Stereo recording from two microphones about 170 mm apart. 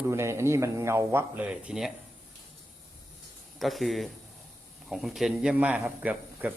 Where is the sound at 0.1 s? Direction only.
15° right (ahead or behind).